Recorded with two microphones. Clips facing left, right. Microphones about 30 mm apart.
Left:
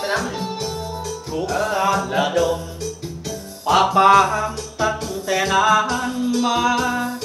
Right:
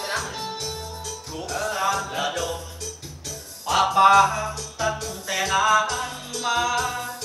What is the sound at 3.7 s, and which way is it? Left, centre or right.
Music, centre.